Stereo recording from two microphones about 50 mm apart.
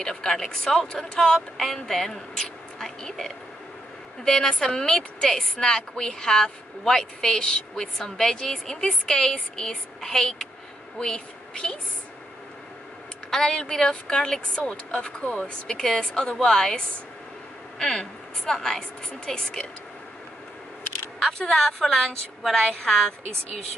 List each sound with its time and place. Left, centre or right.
0.0 s a woman's voice: centre
13.3 s a woman's voice: centre
15.6 s a woman's voice: centre
21.5 s a woman's voice: centre
22.4 s a woman's voice: centre